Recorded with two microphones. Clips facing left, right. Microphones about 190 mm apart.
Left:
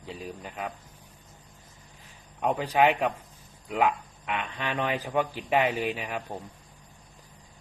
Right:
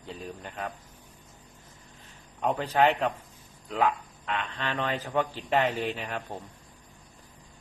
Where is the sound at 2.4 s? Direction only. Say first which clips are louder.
Left 1 dB; 10° left (ahead or behind).